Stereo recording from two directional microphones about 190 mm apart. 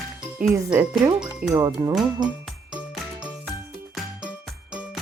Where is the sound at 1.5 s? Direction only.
15° right (ahead or behind).